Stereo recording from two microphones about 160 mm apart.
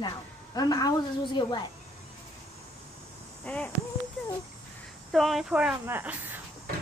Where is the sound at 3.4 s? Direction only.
10° left (ahead or behind).